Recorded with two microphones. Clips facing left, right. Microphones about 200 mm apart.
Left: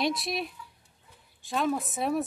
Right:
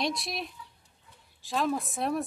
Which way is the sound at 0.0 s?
Centre (ahead or behind).